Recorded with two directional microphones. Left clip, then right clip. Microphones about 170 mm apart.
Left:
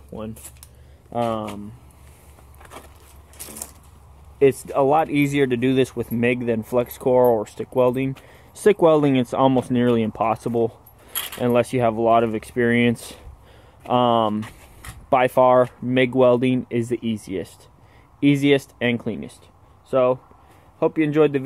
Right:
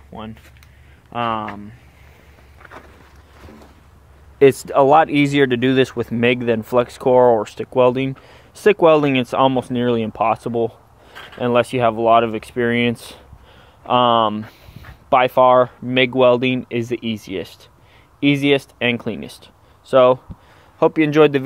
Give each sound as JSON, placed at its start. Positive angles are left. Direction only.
{"t": 1.1, "sound": "speech", "side_deg": 15}
{"t": 4.4, "sound": "speech", "side_deg": -5}
{"t": 8.8, "sound": "a man's voice", "side_deg": 20}